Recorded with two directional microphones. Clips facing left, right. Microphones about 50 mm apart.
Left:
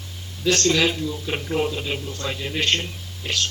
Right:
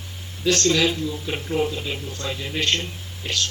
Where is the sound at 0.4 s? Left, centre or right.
Centre.